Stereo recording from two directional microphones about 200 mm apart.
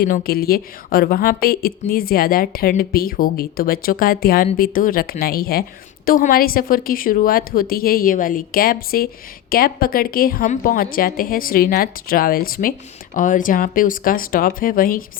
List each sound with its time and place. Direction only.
0.0 s a woman's voice: 50° left (ahead or behind)